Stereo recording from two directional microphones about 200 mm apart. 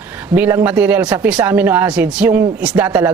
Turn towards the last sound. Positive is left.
turn(degrees=-10)  # may be behind; listen again after turning